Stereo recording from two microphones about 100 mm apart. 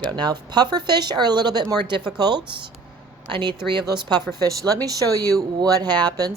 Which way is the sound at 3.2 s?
55° right (ahead or behind).